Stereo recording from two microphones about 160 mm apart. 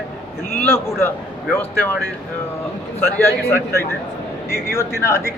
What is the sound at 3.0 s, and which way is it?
A woman's voice, 15° left (ahead or behind).